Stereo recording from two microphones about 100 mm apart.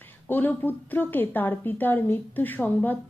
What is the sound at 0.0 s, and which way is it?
A woman's voice, 20° left (ahead or behind).